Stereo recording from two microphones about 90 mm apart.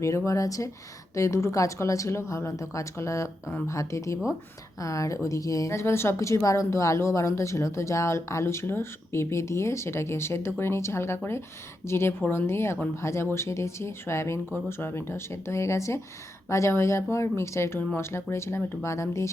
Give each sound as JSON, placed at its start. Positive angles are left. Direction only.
{"t": 0.3, "sound": "a woman's voice", "side_deg": 40}